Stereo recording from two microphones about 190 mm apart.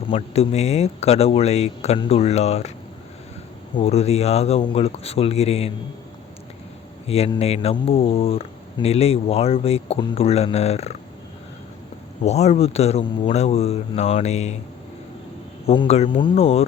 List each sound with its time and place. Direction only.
0.1 s speech: 35° left (ahead or behind)
3.8 s speech: 30° left (ahead or behind)
7.1 s speech: 30° left (ahead or behind)
12.2 s speech: 35° left (ahead or behind)
15.6 s speech: 30° left (ahead or behind)